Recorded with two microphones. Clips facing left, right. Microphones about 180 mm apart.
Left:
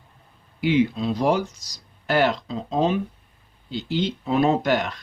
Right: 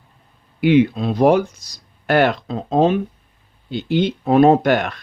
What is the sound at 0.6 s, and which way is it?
Speech, 60° right (ahead or behind).